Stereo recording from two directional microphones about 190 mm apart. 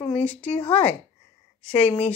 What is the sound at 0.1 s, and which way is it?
Speech, 5° left (ahead or behind).